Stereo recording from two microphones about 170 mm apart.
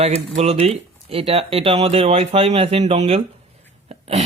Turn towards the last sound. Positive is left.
turn(degrees=-40)  # may be behind; listen again after turning